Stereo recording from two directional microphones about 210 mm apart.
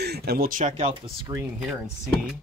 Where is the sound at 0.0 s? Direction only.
50° right (ahead or behind); by 0.9 s 35° right (ahead or behind).